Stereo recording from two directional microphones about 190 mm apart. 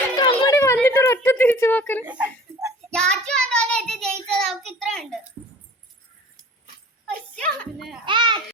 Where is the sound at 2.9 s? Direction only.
5° left (ahead or behind).